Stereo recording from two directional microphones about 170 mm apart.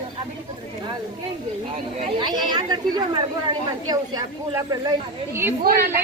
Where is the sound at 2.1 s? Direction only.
25° right (ahead or behind).